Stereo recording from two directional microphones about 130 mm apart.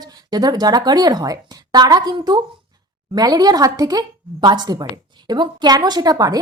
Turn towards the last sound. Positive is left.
turn(degrees=-30)  # may be behind; listen again after turning